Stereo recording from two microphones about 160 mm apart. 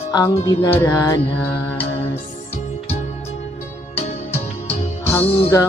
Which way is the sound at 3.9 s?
40° left (ahead or behind).